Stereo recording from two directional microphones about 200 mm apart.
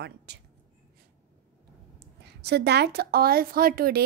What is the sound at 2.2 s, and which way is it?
A woman's voice, 55° right (ahead or behind).